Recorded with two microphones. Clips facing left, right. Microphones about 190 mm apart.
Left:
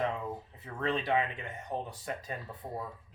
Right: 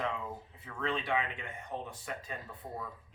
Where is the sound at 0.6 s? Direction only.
35° left (ahead or behind).